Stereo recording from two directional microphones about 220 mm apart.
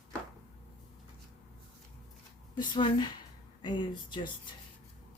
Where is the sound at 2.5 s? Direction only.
20° left (ahead or behind).